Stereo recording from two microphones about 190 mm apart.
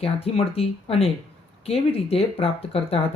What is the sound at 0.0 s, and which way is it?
Speech, 30° left (ahead or behind).